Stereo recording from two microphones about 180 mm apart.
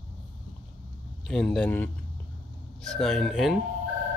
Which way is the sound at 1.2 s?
5° left (ahead or behind).